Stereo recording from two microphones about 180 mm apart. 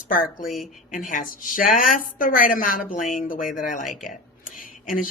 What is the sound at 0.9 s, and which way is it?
Speech, 45° left (ahead or behind).